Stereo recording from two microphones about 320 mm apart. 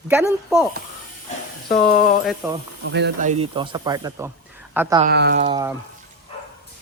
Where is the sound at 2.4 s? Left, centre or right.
Centre.